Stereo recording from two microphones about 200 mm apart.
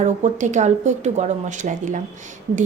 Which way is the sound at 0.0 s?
35° right (ahead or behind).